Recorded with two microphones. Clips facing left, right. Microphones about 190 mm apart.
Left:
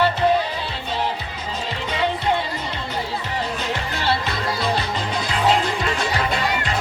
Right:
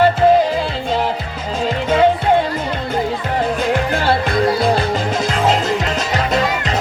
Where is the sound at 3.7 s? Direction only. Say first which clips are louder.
Right 6 dB; 50° right (ahead or behind).